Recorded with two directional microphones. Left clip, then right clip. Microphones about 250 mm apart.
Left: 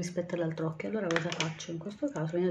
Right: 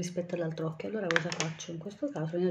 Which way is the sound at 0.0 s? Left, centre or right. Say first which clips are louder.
Left 1 dB; centre.